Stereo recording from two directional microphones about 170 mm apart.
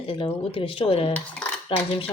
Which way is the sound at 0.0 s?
30° left (ahead or behind).